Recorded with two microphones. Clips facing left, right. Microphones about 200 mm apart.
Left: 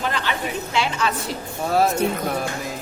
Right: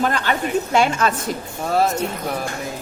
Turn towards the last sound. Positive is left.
turn(degrees=0)  # may be behind; listen again after turning